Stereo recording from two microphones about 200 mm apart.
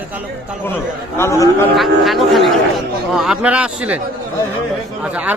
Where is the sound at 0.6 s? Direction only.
10° left (ahead or behind).